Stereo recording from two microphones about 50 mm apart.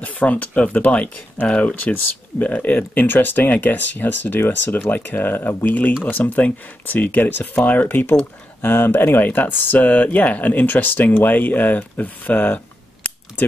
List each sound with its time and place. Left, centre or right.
0.0 s speech: left
9.2 s speech: left